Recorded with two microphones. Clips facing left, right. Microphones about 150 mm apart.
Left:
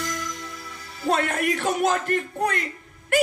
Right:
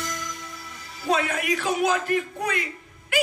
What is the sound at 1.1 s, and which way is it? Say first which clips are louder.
A man's voice: left 1 dB; 55° left (ahead or behind).